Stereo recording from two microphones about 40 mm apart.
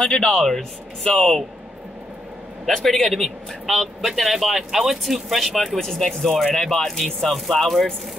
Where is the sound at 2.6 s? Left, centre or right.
Centre.